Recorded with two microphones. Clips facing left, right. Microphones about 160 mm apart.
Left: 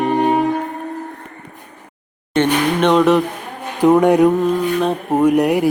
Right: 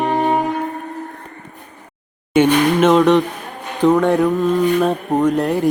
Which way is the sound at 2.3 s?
5° right (ahead or behind).